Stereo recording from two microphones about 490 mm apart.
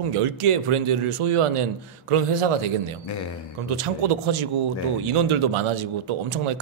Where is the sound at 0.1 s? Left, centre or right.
Right.